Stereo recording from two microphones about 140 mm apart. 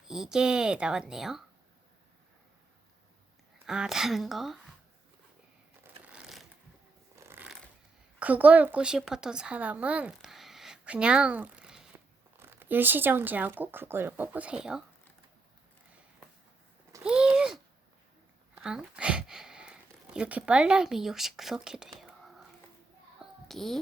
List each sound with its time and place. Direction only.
0.0 s a woman's voice: 5° right (ahead or behind)
3.7 s a woman's voice: 5° right (ahead or behind)
6.1 s shuffling cards: 5° right (ahead or behind)
7.2 s music: 15° right (ahead or behind)
8.2 s speech: 10° right (ahead or behind)
17.0 s a sound: 5° right (ahead or behind)